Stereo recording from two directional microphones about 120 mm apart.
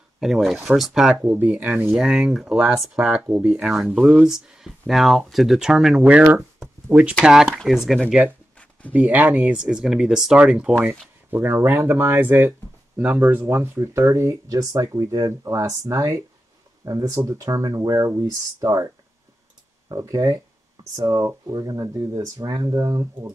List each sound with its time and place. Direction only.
0.2 s speech: centre (ahead or behind)
8.9 s speech: 15° right (ahead or behind)
19.9 s speech: 30° right (ahead or behind)